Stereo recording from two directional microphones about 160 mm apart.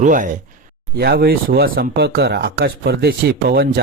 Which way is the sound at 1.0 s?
80° right.